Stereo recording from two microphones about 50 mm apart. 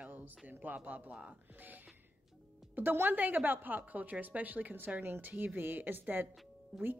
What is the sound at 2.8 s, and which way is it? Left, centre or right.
A woman's voice, right.